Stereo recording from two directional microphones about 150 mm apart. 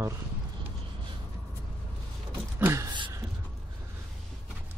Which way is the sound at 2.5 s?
15° right (ahead or behind).